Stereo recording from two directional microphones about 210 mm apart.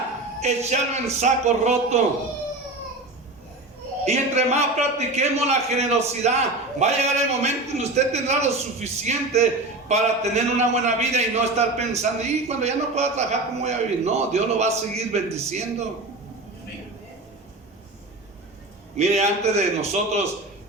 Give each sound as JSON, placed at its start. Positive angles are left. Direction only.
{"t": 0.4, "sound": "a man's voice", "side_deg": -30}
{"t": 4.0, "sound": "a man's voice", "side_deg": -30}
{"t": 18.9, "sound": "a man's voice", "side_deg": -30}